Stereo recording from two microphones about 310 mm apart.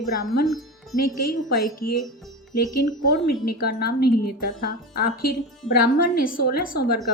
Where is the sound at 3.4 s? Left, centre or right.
Left.